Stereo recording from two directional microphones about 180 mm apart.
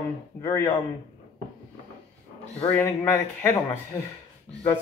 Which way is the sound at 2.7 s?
15° left (ahead or behind).